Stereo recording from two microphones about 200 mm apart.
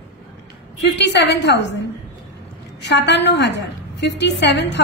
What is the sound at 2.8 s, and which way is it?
A woman's voice, 60° left (ahead or behind).